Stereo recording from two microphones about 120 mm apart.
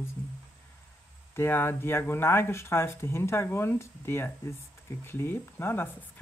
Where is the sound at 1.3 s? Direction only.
20° left (ahead or behind).